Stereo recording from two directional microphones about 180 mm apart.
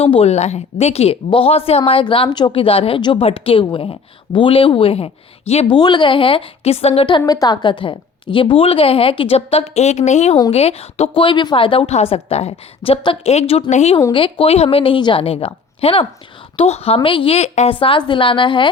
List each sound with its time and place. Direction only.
0.0 s a woman's voice: 35° left (ahead or behind)
7.2 s a woman's voice: 20° left (ahead or behind)